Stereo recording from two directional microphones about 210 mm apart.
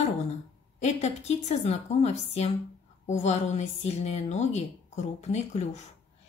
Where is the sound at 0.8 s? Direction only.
30° left (ahead or behind).